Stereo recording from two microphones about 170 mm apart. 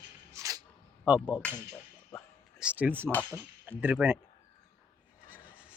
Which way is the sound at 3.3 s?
10° right (ahead or behind).